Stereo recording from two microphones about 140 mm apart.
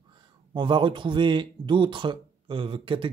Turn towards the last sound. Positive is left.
turn(degrees=-40)  # may be behind; listen again after turning